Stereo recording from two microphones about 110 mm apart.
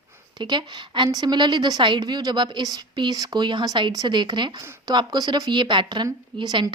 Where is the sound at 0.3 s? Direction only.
40° right (ahead or behind).